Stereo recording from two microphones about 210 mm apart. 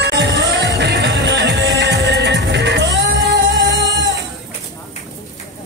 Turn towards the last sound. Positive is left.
turn(degrees=-55)  # may be behind; listen again after turning